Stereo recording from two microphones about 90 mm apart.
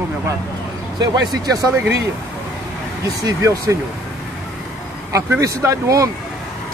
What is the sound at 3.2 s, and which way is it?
Speech, 35° right (ahead or behind).